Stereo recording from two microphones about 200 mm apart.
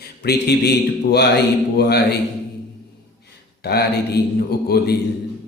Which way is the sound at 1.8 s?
55° left (ahead or behind).